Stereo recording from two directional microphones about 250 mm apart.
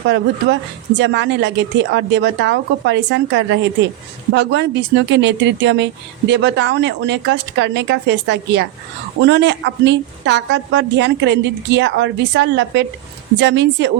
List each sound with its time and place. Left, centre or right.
0.9 s speech: right